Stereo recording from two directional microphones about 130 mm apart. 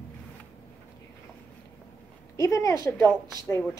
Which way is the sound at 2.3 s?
25° left (ahead or behind).